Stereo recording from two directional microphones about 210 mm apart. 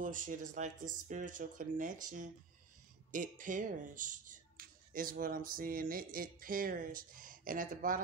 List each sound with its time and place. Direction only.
0.0 s speech: 40° right (ahead or behind)